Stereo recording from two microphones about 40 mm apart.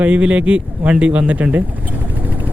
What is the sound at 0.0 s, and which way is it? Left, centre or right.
Speech, right.